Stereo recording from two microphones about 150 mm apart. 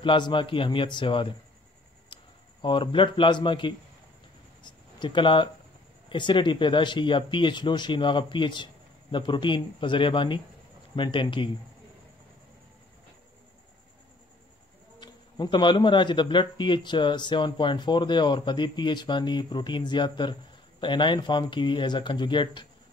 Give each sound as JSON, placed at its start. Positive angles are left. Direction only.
{"t": 0.0, "sound": "speech", "side_deg": 35}
{"t": 2.1, "sound": "a sound", "side_deg": 30}
{"t": 2.6, "sound": "speech", "side_deg": 35}
{"t": 15.0, "sound": "speech", "side_deg": 30}